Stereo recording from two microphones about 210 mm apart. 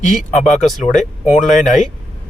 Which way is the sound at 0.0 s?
35° left (ahead or behind).